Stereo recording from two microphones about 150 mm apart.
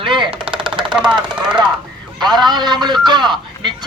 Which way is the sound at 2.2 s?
30° right (ahead or behind).